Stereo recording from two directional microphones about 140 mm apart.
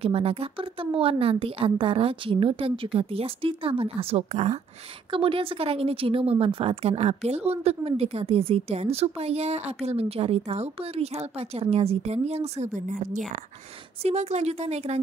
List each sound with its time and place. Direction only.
0.0 s speech: 45° right (ahead or behind)
5.1 s speech: 40° right (ahead or behind); by 13.2 s 60° right (ahead or behind)
14.0 s speech: 50° right (ahead or behind)